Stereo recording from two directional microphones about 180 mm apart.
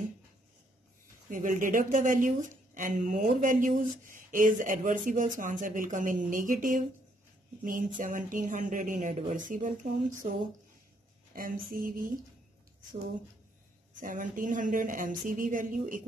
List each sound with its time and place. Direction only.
1.3 s speech: 45° right (ahead or behind)
11.3 s speech: 50° right (ahead or behind)
13.9 s speech: 50° right (ahead or behind)